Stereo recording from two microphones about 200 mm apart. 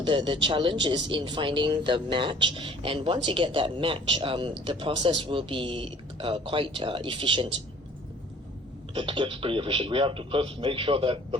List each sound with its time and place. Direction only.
0.0 s speech: 25° right (ahead or behind)
9.0 s speech: 25° right (ahead or behind)